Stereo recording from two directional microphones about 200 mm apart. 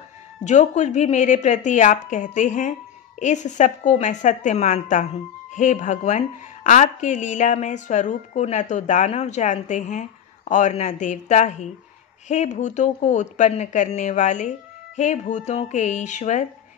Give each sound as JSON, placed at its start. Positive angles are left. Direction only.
{"t": 0.4, "sound": "a woman's voice", "side_deg": 35}